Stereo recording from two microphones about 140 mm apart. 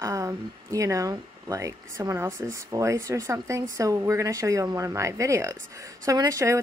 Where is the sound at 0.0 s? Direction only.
20° right (ahead or behind).